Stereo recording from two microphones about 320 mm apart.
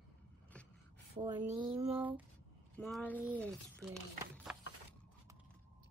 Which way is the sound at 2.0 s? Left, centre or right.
Centre.